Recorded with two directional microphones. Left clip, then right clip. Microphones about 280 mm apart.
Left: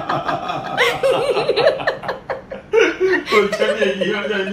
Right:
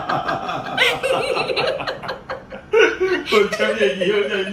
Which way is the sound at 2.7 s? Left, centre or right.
Centre.